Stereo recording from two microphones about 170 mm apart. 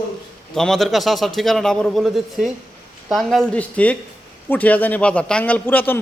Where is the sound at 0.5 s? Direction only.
Centre (ahead or behind).